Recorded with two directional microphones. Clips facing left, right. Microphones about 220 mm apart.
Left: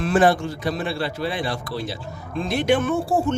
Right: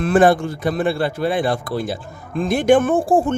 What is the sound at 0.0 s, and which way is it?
A man's voice, 50° right (ahead or behind).